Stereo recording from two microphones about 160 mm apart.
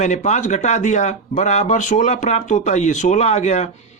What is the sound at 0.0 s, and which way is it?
Speech, 50° left (ahead or behind).